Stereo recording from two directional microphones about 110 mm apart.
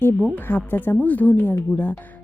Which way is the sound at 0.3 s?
20° left (ahead or behind).